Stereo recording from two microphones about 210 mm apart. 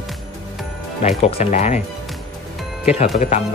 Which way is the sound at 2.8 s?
30° left (ahead or behind).